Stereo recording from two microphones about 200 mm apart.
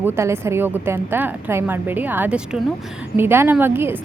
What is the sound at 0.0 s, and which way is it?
A woman's voice, 10° right (ahead or behind).